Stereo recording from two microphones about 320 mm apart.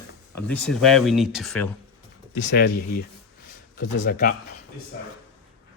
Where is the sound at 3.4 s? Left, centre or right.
Left.